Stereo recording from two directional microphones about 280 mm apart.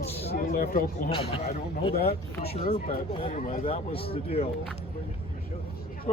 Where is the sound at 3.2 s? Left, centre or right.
Left.